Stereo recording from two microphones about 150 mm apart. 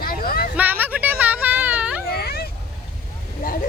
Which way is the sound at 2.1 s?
90° left.